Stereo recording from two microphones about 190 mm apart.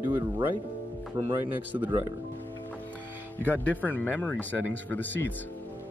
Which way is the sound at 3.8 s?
10° left (ahead or behind).